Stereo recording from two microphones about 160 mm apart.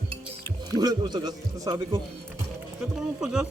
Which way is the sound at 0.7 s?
25° right (ahead or behind).